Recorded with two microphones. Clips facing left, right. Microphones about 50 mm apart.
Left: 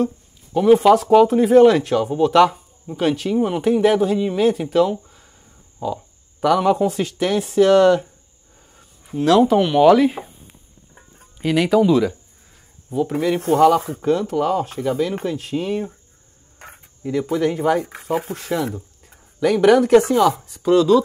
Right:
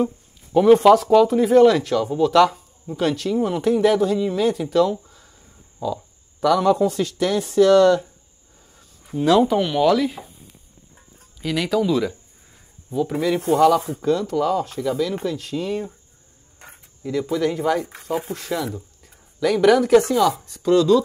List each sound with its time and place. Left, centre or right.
0.5 s speech: centre
1.1 s speech: centre
5.8 s speech: left
9.2 s speech: centre
9.6 s speech: centre
9.9 s speech: left
13.5 s speech: left; by 21.0 s centre